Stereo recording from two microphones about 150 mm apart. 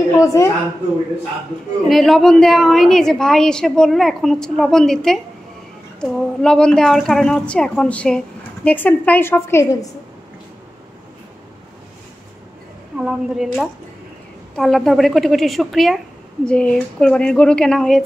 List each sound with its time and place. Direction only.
0.2 s a woman's voice: 20° left (ahead or behind)
1.9 s a woman's voice: centre (ahead or behind); by 9.8 s 20° left (ahead or behind)
12.9 s a woman's voice: 5° right (ahead or behind)